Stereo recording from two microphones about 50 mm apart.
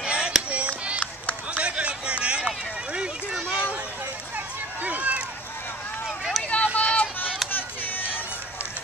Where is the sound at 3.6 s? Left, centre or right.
Right.